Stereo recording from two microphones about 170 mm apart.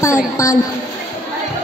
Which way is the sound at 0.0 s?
15° left (ahead or behind).